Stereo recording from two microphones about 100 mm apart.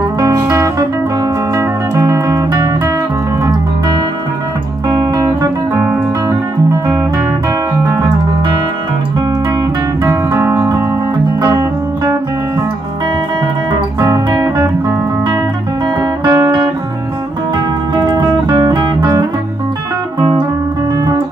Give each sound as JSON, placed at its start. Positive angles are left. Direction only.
{"t": 0.2, "sound": "music", "side_deg": -35}
{"t": 4.8, "sound": "music", "side_deg": -40}
{"t": 10.0, "sound": "music", "side_deg": -30}
{"t": 13.9, "sound": "music", "side_deg": -40}
{"t": 16.0, "sound": "music", "side_deg": -40}
{"t": 18.1, "sound": "music", "side_deg": -45}